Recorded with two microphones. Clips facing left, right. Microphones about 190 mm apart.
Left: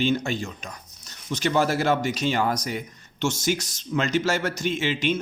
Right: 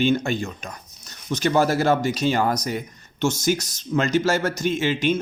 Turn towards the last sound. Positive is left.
turn(degrees=-45)  # may be behind; listen again after turning